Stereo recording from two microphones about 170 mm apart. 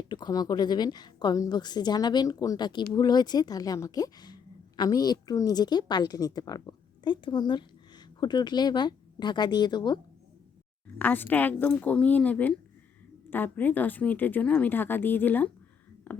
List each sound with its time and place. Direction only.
0.1 s a woman's voice: 25° left (ahead or behind)
10.9 s speech: 10° left (ahead or behind)